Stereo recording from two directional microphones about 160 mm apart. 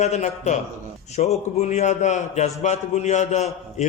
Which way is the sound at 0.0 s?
45° left (ahead or behind).